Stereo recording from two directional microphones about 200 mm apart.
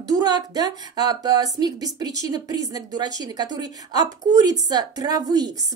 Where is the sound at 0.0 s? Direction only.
20° right (ahead or behind).